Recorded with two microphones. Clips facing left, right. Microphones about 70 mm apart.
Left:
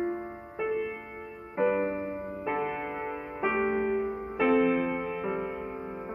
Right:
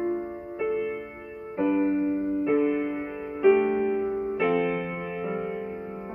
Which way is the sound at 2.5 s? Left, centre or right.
Left.